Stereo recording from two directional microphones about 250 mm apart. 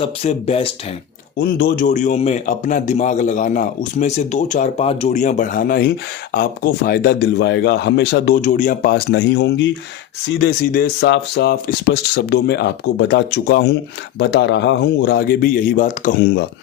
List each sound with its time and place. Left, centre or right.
0.0 s a man's voice: left
1.4 s a man's voice: left